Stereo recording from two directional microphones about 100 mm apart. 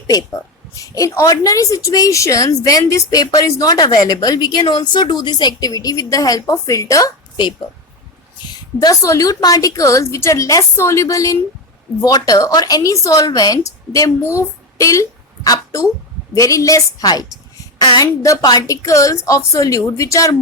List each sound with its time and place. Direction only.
0.1 s speech: 35° left (ahead or behind)
8.4 s a woman's voice: 40° left (ahead or behind)